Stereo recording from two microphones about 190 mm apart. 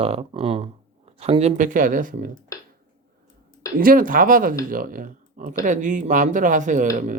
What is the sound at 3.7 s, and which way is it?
Speech, 50° right (ahead or behind).